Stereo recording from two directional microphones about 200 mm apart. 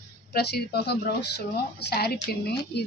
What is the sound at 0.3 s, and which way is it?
A woman's voice, 50° left (ahead or behind).